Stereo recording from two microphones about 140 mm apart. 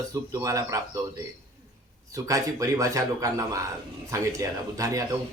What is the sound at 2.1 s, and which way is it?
A man's voice, 25° right (ahead or behind).